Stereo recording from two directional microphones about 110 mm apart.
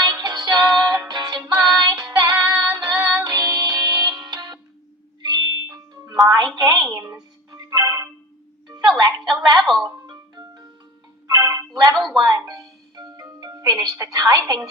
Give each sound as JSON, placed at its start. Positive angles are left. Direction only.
{"t": 0.0, "sound": "music", "side_deg": -35}
{"t": 5.2, "sound": "ding", "side_deg": -40}
{"t": 6.9, "sound": "music", "side_deg": -30}
{"t": 8.6, "sound": "music", "side_deg": -40}
{"t": 9.0, "sound": "a sound", "side_deg": -40}
{"t": 9.6, "sound": "music", "side_deg": 0}
{"t": 10.1, "sound": "marimba", "side_deg": -40}
{"t": 11.3, "sound": "music", "side_deg": -30}
{"t": 11.7, "sound": "a sound", "side_deg": -35}
{"t": 12.1, "sound": "music", "side_deg": -35}
{"t": 13.4, "sound": "a woman's voice", "side_deg": -35}